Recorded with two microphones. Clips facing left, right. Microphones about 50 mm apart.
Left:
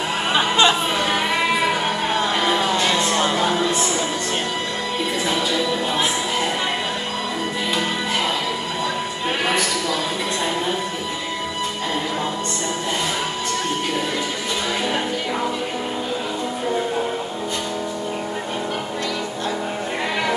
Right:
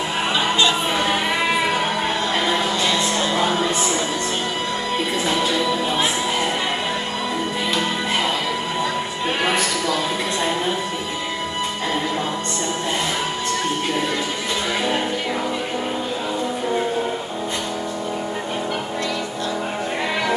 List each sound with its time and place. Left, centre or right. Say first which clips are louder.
0.3 s music: left 3 dB; left
2.7 s music: left 1 dB; left